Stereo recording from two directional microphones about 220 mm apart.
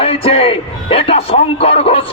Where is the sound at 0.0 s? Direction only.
25° left (ahead or behind).